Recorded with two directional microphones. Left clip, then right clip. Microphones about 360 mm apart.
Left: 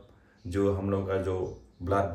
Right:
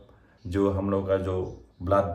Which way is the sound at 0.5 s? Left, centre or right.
Centre.